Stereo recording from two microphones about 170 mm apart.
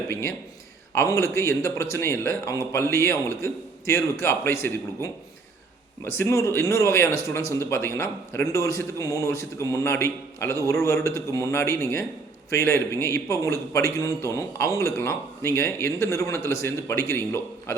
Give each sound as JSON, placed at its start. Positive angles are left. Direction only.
{"t": 0.1, "sound": "a man's voice", "side_deg": 15}